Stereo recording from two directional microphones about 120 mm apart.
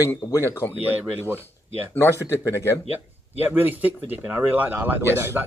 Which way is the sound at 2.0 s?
20° left (ahead or behind).